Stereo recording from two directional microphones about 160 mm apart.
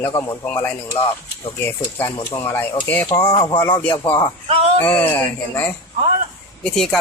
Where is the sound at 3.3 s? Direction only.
25° left (ahead or behind).